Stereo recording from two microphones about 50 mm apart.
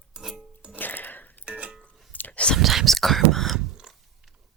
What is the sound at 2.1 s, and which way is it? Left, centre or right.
Whispering, left.